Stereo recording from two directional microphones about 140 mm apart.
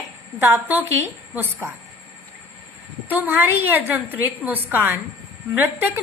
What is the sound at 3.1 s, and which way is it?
A woman's voice, 15° right (ahead or behind).